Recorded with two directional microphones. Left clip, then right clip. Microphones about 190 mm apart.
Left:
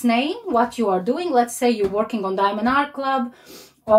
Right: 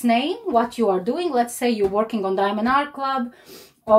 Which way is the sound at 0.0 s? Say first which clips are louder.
Even; 35° right (ahead or behind).